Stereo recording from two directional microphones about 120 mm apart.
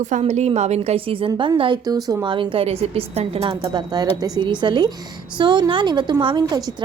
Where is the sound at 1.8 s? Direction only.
30° right (ahead or behind).